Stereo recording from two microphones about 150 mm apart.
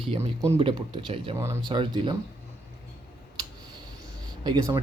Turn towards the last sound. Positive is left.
turn(degrees=-30)  # may be behind; listen again after turning